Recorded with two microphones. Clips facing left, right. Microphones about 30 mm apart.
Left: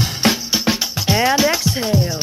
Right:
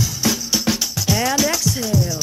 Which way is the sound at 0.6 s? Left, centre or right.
Left.